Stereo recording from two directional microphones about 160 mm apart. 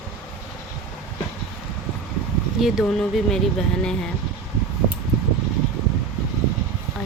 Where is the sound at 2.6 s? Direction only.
Centre (ahead or behind).